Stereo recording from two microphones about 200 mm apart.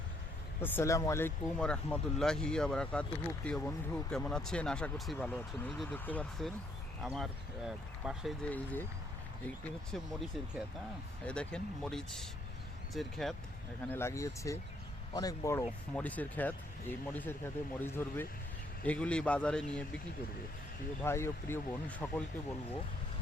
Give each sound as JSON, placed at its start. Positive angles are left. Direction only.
{"t": 0.6, "sound": "speech", "side_deg": 10}
{"t": 8.4, "sound": "speech", "side_deg": 10}
{"t": 9.9, "sound": "speech", "side_deg": 0}
{"t": 11.3, "sound": "speech", "side_deg": 5}
{"t": 13.8, "sound": "speech", "side_deg": 10}
{"t": 21.0, "sound": "speech", "side_deg": 10}